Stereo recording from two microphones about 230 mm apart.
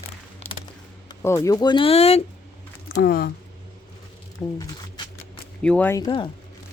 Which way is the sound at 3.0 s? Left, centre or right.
Left.